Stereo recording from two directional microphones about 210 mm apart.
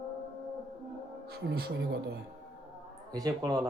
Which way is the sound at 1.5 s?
55° right (ahead or behind).